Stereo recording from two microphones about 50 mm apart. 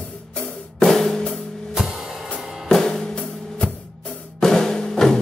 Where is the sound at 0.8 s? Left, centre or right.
Centre.